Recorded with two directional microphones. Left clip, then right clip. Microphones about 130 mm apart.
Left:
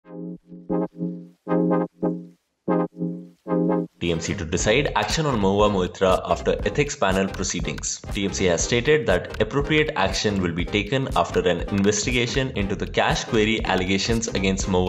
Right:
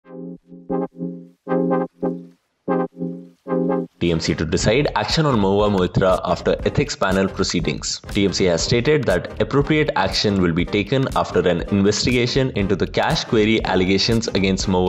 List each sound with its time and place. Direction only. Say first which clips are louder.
0.7 s music: right 2 dB; 5° right (ahead or behind)
1.5 s brass instrument: right 2 dB; centre (ahead or behind)
2.6 s music: right 2 dB; centre (ahead or behind)
3.4 s brass instrument: right 2 dB; centre (ahead or behind)
4.0 s speech: right 5 dB; 55° right (ahead or behind)